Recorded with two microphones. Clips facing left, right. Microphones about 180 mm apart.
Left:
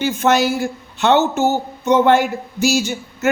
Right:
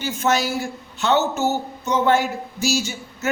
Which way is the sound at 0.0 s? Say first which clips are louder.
Left 6 dB; 60° left (ahead or behind).